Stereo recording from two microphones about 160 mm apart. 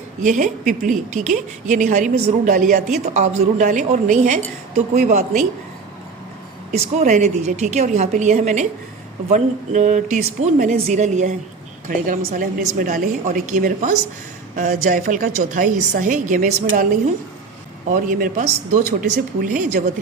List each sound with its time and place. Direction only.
0.2 s a woman's voice: 55° right (ahead or behind)
6.7 s a woman's voice: 45° right (ahead or behind)
17.8 s a woman's voice: 55° right (ahead or behind)